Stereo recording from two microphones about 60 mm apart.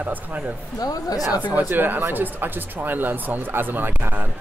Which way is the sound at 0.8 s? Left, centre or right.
Left.